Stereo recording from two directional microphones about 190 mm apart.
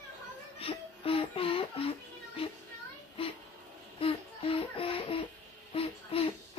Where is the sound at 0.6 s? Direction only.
30° left (ahead or behind).